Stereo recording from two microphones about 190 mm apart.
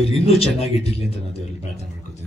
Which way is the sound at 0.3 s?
30° left (ahead or behind).